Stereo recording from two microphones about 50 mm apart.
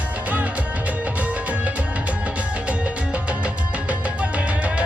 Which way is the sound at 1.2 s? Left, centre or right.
Right.